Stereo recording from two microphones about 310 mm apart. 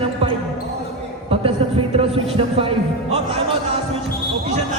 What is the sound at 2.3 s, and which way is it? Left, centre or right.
Music, centre.